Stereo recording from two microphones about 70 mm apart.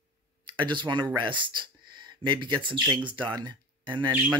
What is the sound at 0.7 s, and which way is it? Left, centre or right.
Speech, right.